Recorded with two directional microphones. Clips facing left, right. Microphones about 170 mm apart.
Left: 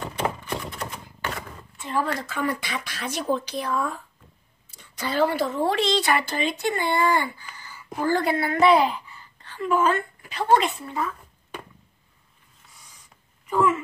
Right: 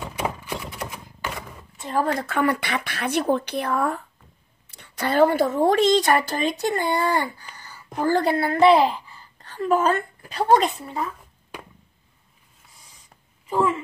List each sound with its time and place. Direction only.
0.1 s typewriter: 10° right (ahead or behind)
1.8 s speech: 45° right (ahead or behind)
2.2 s a woman's voice: 65° right (ahead or behind); by 10.5 s 40° right (ahead or behind)
11.0 s a sound: 10° right (ahead or behind)
13.5 s speech: 30° right (ahead or behind)